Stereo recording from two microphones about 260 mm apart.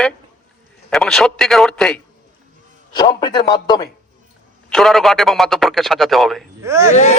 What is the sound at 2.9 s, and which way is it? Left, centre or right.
Speech, centre.